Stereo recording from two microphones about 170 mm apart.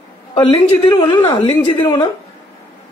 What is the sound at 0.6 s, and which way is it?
A woman's voice, 30° left (ahead or behind).